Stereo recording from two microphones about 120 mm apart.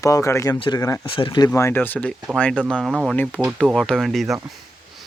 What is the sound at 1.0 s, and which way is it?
Speech, 45° left (ahead or behind).